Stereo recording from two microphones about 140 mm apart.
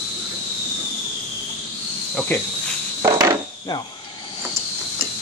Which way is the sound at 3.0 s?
20° right (ahead or behind).